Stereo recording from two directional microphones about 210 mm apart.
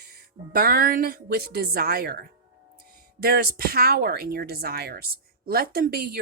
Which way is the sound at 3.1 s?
45° right (ahead or behind).